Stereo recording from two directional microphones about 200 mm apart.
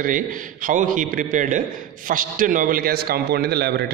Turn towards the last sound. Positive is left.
turn(degrees=-55)  # may be behind; listen again after turning